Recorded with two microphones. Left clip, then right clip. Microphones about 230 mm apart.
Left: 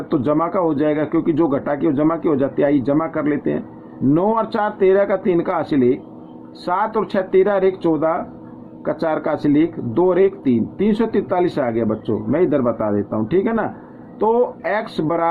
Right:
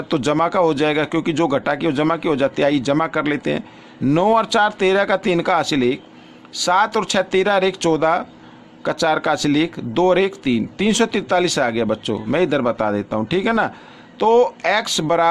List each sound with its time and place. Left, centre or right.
0.1 s speech: right